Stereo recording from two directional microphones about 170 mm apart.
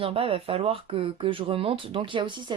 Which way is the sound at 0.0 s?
35° right (ahead or behind).